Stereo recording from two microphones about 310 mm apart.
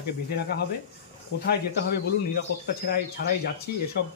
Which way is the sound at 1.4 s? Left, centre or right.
Left.